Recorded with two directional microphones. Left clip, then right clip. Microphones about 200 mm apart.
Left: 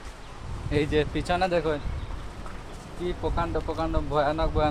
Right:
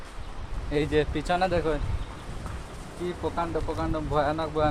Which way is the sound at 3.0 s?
Centre (ahead or behind).